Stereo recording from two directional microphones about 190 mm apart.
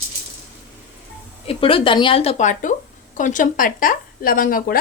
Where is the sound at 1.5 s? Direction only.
30° left (ahead or behind).